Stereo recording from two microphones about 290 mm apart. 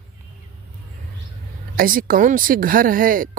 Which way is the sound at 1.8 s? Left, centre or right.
Right.